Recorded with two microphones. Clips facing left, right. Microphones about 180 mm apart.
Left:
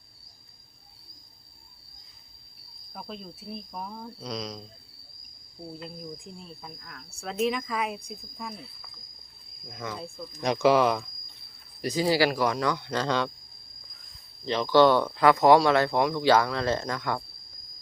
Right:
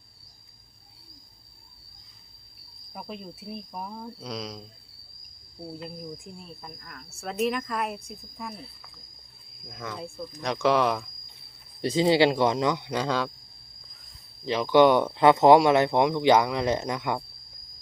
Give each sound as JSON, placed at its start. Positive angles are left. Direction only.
{"t": 2.9, "sound": "speech", "side_deg": -10}
{"t": 5.8, "sound": "speech", "side_deg": -5}
{"t": 11.8, "sound": "speech", "side_deg": -25}
{"t": 14.4, "sound": "speech", "side_deg": -10}